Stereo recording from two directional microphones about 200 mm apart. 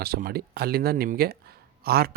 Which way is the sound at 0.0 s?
50° right (ahead or behind).